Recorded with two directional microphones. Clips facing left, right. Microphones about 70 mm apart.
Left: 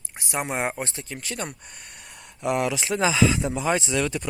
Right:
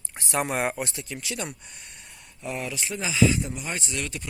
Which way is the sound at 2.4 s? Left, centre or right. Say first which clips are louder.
Left 8 dB; left.